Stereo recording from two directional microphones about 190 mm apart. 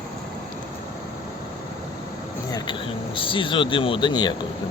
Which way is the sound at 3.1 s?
25° left (ahead or behind).